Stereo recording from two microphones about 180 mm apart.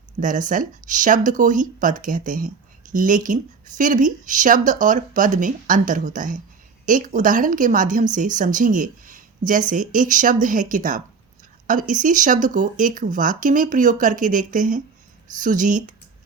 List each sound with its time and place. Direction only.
0.2 s speech: 45° right (ahead or behind)